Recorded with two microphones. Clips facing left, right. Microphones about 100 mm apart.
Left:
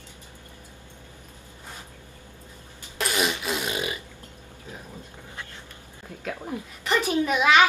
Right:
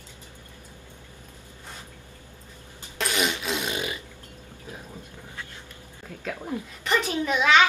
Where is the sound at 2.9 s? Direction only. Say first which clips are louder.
Left 1 dB; centre (ahead or behind).